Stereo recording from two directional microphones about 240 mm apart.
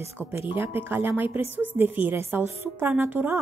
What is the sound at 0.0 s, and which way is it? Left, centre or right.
A woman's voice, centre.